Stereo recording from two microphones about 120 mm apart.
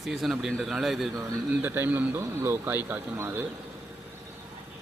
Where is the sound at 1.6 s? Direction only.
15° right (ahead or behind).